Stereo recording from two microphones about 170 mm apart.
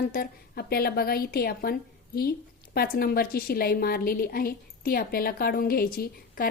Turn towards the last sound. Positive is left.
turn(degrees=60)  # may be behind; listen again after turning